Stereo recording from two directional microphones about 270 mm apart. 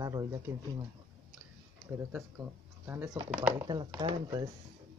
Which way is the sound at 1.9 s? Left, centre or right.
Centre.